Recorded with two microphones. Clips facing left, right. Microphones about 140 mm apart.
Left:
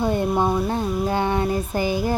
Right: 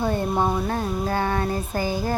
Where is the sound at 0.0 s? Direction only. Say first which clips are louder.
Left 2 dB; 15° left (ahead or behind).